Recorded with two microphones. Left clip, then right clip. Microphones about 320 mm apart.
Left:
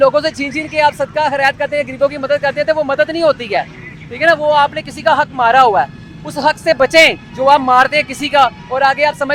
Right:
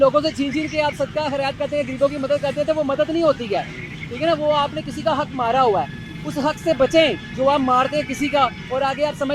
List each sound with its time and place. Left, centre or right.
0.0 s speech: left